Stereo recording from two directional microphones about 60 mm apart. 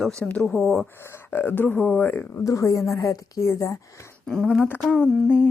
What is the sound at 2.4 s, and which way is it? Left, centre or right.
A woman's voice, left.